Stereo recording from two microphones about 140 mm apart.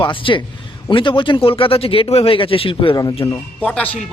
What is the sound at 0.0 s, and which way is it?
A man's voice, 35° left (ahead or behind).